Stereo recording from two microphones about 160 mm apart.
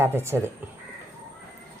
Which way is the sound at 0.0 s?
15° right (ahead or behind).